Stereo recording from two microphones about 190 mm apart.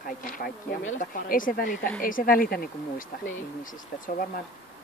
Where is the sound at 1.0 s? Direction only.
45° left (ahead or behind).